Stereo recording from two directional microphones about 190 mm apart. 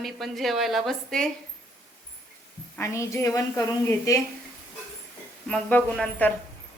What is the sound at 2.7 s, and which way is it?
A woman's voice, 15° left (ahead or behind).